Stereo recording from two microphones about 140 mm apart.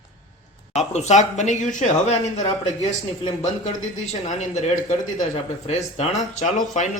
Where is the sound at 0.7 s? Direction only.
50° left (ahead or behind).